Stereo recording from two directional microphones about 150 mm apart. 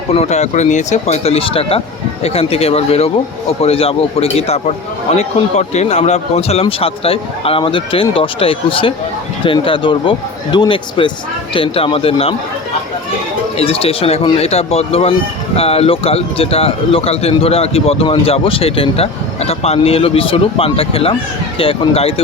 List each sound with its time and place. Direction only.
0.1 s speech: 45° left (ahead or behind)
13.6 s speech: 40° left (ahead or behind)